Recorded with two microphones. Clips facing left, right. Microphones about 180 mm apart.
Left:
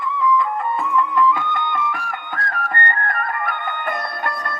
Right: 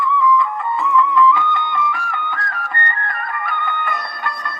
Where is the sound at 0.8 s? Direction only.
50° left (ahead or behind).